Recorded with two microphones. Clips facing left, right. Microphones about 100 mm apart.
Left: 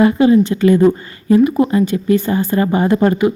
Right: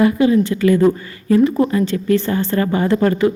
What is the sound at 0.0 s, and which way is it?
A woman's voice, 30° left (ahead or behind).